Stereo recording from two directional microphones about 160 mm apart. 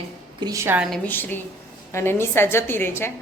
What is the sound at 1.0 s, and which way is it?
A woman's voice, 10° left (ahead or behind).